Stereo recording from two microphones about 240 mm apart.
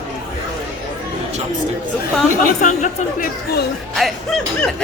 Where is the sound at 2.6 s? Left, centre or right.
Left.